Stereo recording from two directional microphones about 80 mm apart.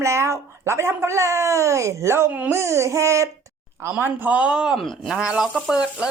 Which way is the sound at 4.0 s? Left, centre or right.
Right.